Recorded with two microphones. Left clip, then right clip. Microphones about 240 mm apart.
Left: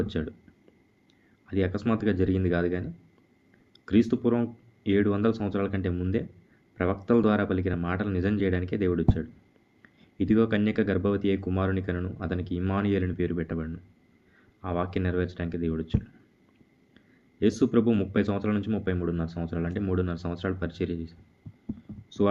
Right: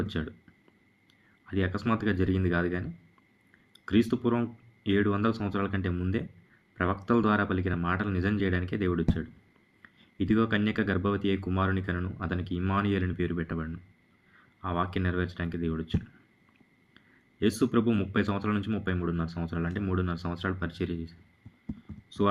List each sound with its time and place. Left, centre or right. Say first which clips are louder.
0.0 s speech: left 3 dB; centre
1.5 s speech: left 2 dB; centre
4.1 s speech: left 3 dB; centre
17.6 s speech: left 3 dB; centre
22.2 s speech: left 2 dB; centre